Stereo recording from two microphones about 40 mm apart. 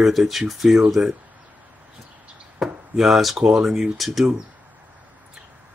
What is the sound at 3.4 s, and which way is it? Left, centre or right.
Speech, centre.